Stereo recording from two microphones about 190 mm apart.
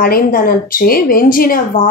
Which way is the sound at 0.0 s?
50° left (ahead or behind).